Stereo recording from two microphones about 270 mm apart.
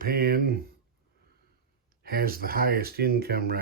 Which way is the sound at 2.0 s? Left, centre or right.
Right.